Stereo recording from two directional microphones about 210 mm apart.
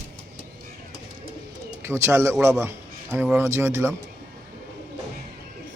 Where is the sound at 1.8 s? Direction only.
10° right (ahead or behind).